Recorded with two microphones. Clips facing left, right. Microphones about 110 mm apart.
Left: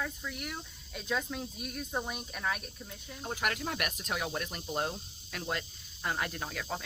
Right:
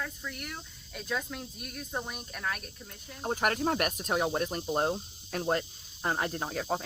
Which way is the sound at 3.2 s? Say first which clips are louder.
Right 6 dB; 40° right (ahead or behind).